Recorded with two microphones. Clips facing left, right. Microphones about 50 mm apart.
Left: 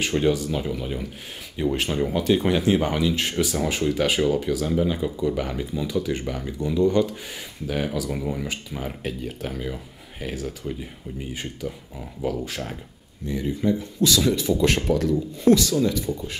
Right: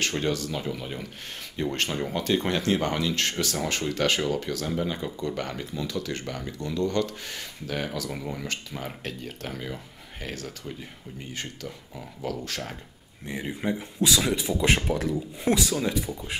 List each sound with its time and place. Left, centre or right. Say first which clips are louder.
0.0 s speech: left 5 dB; centre
13.3 s speech: left 6 dB; right